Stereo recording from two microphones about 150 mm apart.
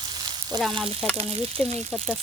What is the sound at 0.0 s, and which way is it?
Frying, 30° right (ahead or behind).